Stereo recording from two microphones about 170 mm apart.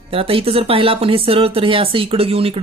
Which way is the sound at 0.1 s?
35° right (ahead or behind).